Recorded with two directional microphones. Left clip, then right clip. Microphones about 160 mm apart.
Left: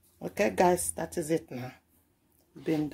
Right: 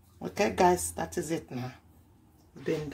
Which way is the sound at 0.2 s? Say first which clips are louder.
Even; 55° left (ahead or behind).